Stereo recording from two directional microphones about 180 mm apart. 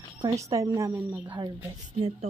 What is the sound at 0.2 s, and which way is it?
Speech, 20° right (ahead or behind).